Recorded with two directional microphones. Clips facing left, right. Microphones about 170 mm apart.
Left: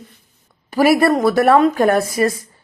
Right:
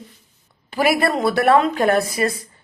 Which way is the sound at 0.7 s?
40° left (ahead or behind).